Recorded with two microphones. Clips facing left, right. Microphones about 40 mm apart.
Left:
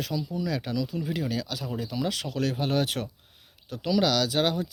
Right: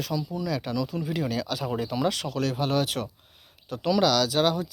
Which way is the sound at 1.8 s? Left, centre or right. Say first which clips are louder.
Right 3 dB; centre.